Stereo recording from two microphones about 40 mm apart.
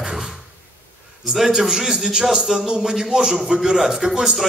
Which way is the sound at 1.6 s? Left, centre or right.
Centre.